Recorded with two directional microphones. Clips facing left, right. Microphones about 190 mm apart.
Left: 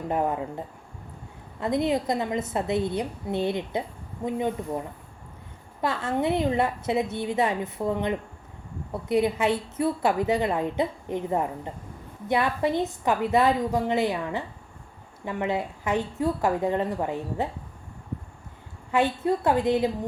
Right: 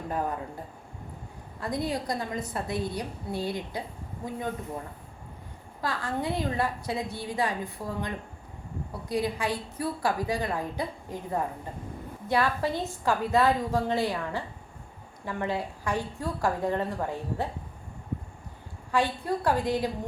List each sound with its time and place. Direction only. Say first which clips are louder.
0.1 s a woman's voice: left 5 dB; 20° left (ahead or behind)
1.6 s a woman's voice: left 6 dB; 20° left (ahead or behind)
5.8 s a woman's voice: left 5 dB; 25° left (ahead or behind)
18.9 s a woman's voice: left 4 dB; 20° left (ahead or behind)